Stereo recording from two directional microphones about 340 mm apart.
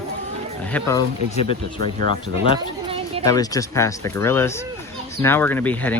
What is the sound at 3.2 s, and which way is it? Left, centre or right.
Speech, centre.